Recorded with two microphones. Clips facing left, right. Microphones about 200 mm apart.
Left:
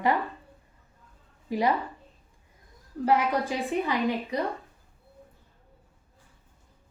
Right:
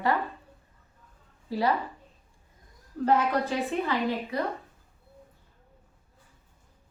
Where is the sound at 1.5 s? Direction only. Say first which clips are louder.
Left 1 dB; 15° left (ahead or behind).